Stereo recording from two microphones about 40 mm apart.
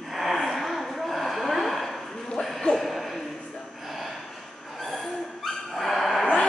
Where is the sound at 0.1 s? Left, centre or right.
Centre.